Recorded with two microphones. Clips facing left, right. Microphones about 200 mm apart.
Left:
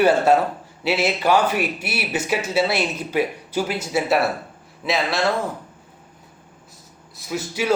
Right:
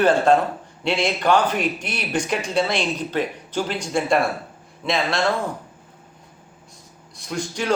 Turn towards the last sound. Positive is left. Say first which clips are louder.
# left 1 dB
turn(degrees=5)  # may be behind; listen again after turning